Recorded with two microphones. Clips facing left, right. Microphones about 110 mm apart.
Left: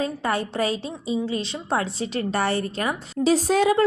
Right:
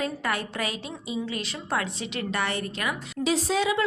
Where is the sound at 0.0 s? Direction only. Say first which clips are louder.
Left 4 dB; 30° left (ahead or behind).